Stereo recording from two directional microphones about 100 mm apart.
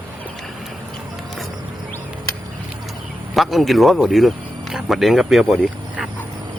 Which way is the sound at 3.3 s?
Centre (ahead or behind).